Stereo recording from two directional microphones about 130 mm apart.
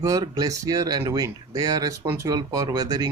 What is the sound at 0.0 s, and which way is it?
Speech, 25° right (ahead or behind).